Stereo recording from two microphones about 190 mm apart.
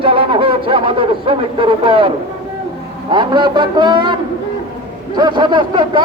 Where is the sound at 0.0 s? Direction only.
30° right (ahead or behind).